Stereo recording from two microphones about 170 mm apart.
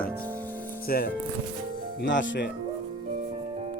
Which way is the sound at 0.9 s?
60° left (ahead or behind).